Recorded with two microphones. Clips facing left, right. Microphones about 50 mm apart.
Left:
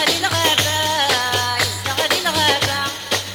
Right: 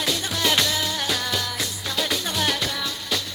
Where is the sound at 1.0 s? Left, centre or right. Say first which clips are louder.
Left 7 dB; left.